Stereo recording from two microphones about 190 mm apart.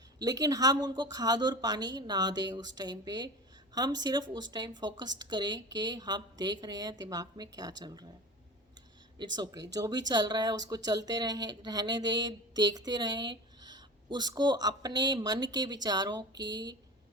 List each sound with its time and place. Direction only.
0.2 s speech: 20° right (ahead or behind)
9.1 s speech: 20° right (ahead or behind)